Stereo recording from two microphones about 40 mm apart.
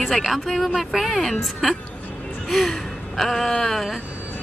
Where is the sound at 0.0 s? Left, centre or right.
Centre.